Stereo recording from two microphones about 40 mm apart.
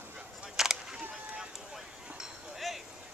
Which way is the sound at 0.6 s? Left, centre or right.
Centre.